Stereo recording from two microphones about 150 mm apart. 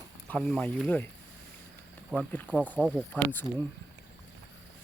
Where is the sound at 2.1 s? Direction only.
10° left (ahead or behind).